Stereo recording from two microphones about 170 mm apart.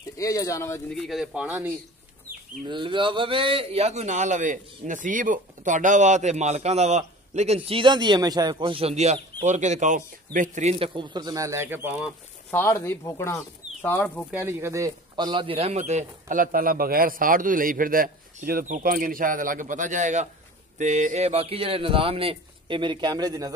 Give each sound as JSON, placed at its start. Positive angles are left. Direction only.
{"t": 0.2, "sound": "speech", "side_deg": 20}
{"t": 0.8, "sound": "speech", "side_deg": 0}
{"t": 2.7, "sound": "a man's voice", "side_deg": -30}
{"t": 12.4, "sound": "speech", "side_deg": 15}
{"t": 14.3, "sound": "a man's voice", "side_deg": -15}